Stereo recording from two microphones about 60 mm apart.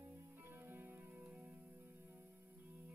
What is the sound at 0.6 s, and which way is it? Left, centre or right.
Music, right.